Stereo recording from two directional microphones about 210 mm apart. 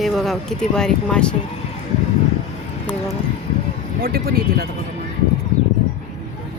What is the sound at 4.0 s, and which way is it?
Speech, 45° right (ahead or behind).